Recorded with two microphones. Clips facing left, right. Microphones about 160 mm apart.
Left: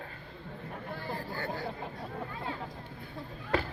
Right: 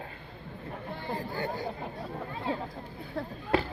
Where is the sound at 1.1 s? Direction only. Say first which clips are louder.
Right 5 dB; 15° right (ahead or behind).